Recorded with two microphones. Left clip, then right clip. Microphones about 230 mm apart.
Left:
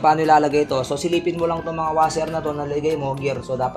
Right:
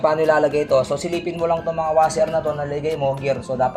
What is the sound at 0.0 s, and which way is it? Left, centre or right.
Speech, left.